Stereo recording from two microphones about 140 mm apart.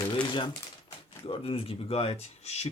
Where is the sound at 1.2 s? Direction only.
40° left (ahead or behind).